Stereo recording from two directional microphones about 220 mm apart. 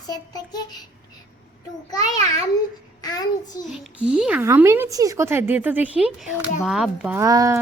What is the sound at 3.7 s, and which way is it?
Speech, 5° right (ahead or behind).